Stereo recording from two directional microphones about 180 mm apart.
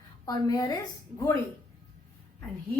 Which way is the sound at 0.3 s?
20° left (ahead or behind).